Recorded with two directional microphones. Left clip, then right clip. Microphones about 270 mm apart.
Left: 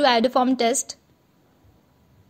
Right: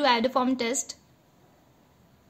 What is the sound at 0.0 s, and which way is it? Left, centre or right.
Speech, left.